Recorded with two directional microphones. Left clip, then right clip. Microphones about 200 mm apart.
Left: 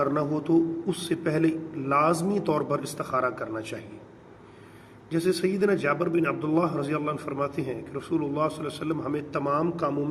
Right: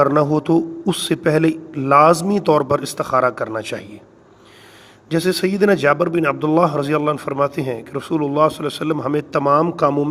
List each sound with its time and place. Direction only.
0.0 s a man's voice: 55° right (ahead or behind)
5.0 s a man's voice: 50° right (ahead or behind)